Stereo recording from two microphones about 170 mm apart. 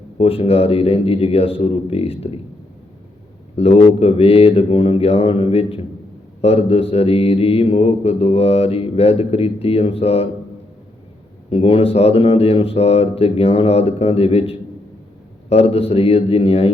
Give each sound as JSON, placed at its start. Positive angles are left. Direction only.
{"t": 0.2, "sound": "mantra", "side_deg": 35}
{"t": 3.5, "sound": "mantra", "side_deg": 35}
{"t": 11.4, "sound": "mantra", "side_deg": 35}